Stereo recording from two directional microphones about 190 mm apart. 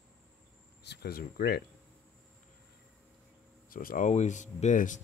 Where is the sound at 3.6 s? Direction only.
45° left (ahead or behind).